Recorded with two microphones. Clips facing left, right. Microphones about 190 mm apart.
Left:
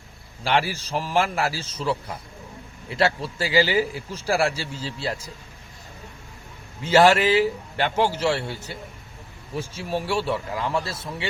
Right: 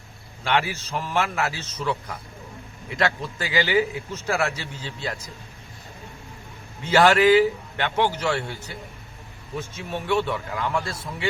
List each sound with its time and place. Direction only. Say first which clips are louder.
0.4 s a man's voice: left 1 dB; 35° left (ahead or behind)
6.8 s a man's voice: even; 25° left (ahead or behind)